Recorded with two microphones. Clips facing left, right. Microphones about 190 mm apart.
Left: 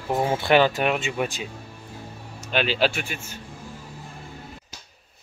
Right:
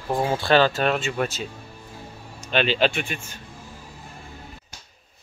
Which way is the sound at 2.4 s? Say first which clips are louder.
Right 1 dB; 5° left (ahead or behind).